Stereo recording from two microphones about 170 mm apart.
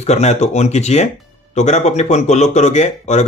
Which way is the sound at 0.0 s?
40° left (ahead or behind).